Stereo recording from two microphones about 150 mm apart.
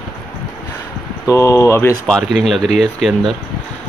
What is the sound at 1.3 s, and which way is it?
Speech, 20° left (ahead or behind).